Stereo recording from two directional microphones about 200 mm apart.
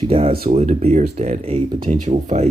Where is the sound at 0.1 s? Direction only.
30° right (ahead or behind).